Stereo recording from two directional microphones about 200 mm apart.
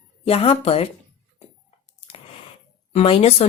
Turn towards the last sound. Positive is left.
turn(degrees=30)  # may be behind; listen again after turning